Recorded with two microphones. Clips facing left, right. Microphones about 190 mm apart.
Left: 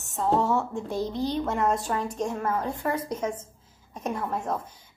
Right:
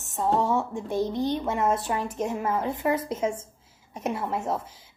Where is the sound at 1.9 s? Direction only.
20° right (ahead or behind).